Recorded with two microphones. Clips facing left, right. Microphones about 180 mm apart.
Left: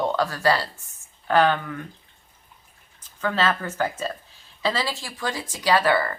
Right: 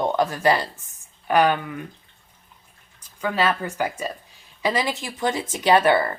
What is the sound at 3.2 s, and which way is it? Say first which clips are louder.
Speech: right 1 dB; 10° right (ahead or behind).